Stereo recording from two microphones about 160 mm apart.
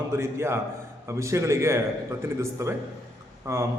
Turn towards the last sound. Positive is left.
turn(degrees=-15)  # may be behind; listen again after turning